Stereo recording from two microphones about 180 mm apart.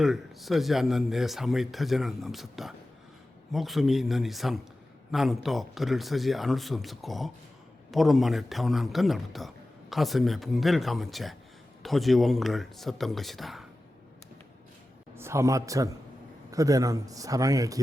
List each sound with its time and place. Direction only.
0.0 s speech: centre (ahead or behind)
15.1 s a man's voice: 15° right (ahead or behind)